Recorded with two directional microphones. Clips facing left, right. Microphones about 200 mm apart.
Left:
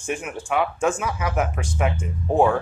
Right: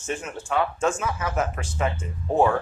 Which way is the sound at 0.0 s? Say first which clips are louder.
Left 2 dB; 10° left (ahead or behind).